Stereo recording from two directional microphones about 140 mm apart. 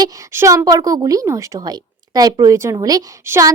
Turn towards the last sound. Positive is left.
turn(degrees=-20)  # may be behind; listen again after turning